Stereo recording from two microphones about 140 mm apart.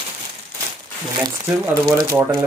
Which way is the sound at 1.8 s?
25° right (ahead or behind).